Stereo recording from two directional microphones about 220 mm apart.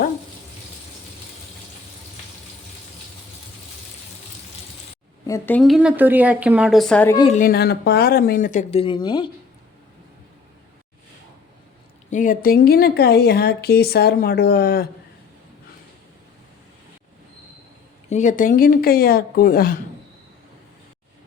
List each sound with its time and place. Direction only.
5.2 s speech: 10° left (ahead or behind)
7.3 s speech: 40° left (ahead or behind); by 9.3 s 20° left (ahead or behind)
12.1 s speech: 35° left (ahead or behind)
18.1 s speech: 35° left (ahead or behind)